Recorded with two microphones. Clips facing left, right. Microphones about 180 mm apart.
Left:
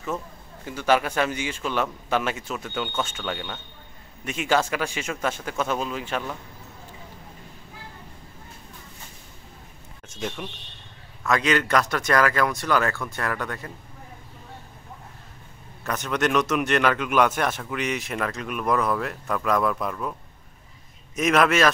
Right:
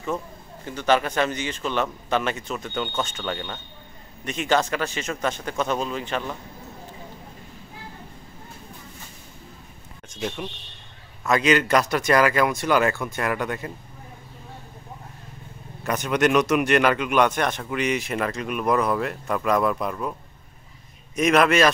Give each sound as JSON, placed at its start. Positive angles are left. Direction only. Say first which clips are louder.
{"t": 0.7, "sound": "a man's voice", "louder": "right 1 dB", "side_deg": 5}
{"t": 10.1, "sound": "a man's voice", "louder": "right 2 dB", "side_deg": -10}
{"t": 11.7, "sound": "speech", "louder": "right 2 dB", "side_deg": -15}
{"t": 15.8, "sound": "a man's voice", "louder": "right 4 dB", "side_deg": -15}
{"t": 21.2, "sound": "a man's voice", "louder": "right 2 dB", "side_deg": 0}